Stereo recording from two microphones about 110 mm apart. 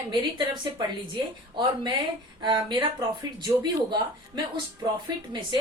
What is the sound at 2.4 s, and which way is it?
A woman's voice, 45° right (ahead or behind).